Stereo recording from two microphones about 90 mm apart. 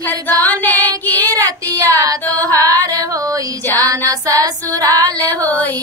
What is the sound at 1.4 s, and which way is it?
Child singing, 40° right (ahead or behind).